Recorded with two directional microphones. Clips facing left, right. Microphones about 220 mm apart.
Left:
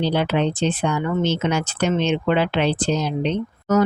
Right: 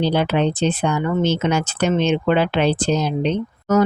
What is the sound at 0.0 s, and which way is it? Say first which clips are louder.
Speech: right 2 dB; 45° right (ahead or behind).